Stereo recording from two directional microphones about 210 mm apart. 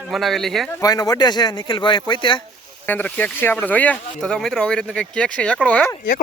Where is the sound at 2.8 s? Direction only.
10° left (ahead or behind).